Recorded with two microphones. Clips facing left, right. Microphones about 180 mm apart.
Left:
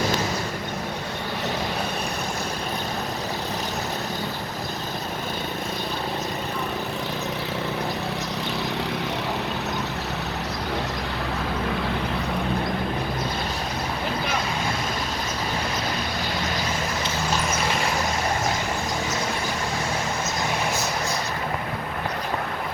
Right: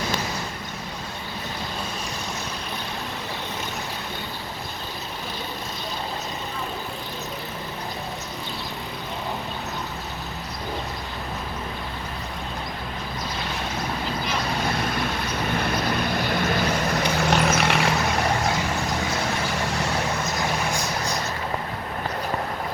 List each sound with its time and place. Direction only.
17.3 s vehicle: 70° right (ahead or behind)